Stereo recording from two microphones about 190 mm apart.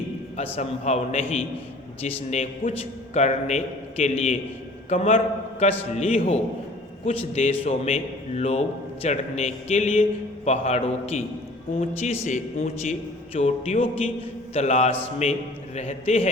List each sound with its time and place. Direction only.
0.5 s a man's voice: 35° left (ahead or behind)